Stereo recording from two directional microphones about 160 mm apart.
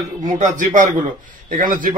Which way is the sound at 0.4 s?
50° right (ahead or behind).